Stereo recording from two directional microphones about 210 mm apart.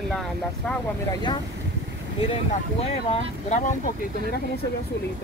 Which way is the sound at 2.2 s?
30° left (ahead or behind).